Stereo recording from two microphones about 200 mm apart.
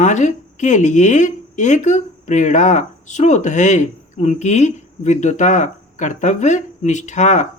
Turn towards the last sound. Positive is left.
turn(degrees=35)  # may be behind; listen again after turning